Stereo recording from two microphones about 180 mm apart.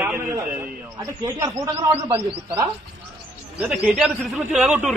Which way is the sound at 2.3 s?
30° right (ahead or behind).